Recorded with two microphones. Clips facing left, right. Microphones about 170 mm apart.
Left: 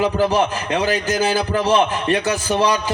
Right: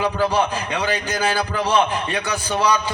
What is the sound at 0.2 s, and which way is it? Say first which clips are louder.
A man's voice: left 2 dB; 40° left (ahead or behind).